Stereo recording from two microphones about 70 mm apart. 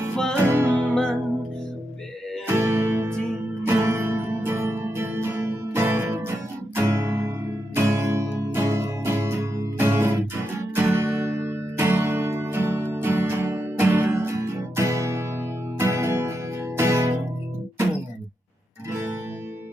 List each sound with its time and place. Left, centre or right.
0.3 s music: right
0.8 s music: centre
2.5 s music: right
6.7 s guitar: right
7.9 s music: right
18.9 s music: right